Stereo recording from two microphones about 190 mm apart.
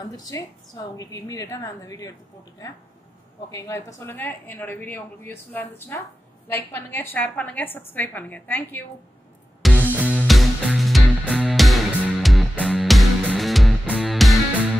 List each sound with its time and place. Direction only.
0.0 s a woman's voice: 20° left (ahead or behind)
3.5 s speech: 15° left (ahead or behind)
9.6 s music: 5° left (ahead or behind)